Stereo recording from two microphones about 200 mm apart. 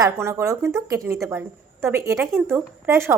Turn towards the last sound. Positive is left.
turn(degrees=-10)  # may be behind; listen again after turning